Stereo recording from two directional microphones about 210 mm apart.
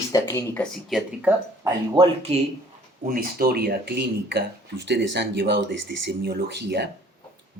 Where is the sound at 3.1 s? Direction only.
45° right (ahead or behind).